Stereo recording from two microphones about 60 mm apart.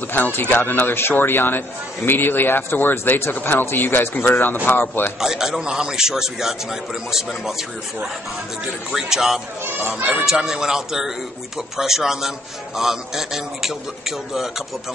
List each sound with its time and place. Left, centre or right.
0.1 s speech: left
5.2 s speech: centre
8.9 s speech: centre